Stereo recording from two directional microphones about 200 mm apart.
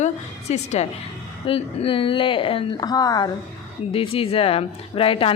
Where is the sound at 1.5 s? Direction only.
25° left (ahead or behind).